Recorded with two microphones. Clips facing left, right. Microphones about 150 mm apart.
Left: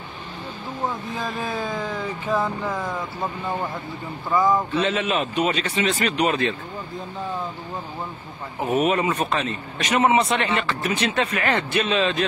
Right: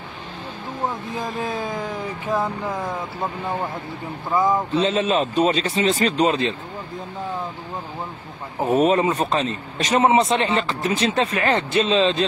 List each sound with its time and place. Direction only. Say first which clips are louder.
1.1 s a man's voice: right 1 dB; 20° right (ahead or behind)
4.3 s a man's voice: even; 20° right (ahead or behind)
8.5 s a man's voice: right 3 dB; 20° right (ahead or behind)